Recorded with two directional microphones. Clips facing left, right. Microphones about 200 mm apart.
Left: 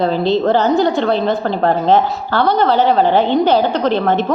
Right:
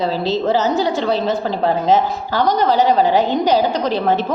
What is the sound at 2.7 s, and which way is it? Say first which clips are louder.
Speech: left 1 dB; 10° right (ahead or behind).